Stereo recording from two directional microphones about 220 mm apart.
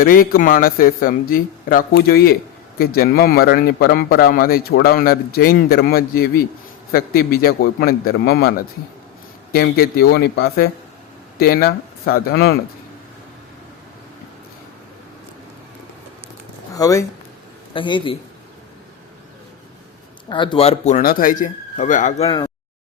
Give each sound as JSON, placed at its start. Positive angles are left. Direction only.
{"t": 0.0, "sound": "a man's voice", "side_deg": 40}
{"t": 16.7, "sound": "a man's voice", "side_deg": 15}
{"t": 20.3, "sound": "speech", "side_deg": 20}
{"t": 22.3, "sound": "speech", "side_deg": 20}